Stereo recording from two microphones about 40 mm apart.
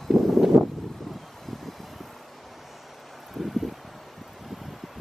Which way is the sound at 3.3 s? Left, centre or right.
Centre.